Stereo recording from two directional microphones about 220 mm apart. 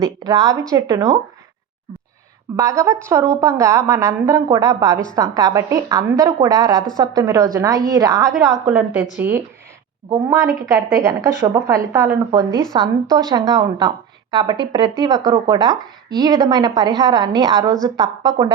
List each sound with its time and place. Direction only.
0.0 s a woman's voice: 15° right (ahead or behind)
2.6 s a woman's voice: 15° right (ahead or behind)
8.3 s a woman's voice: centre (ahead or behind); by 18.5 s 20° right (ahead or behind)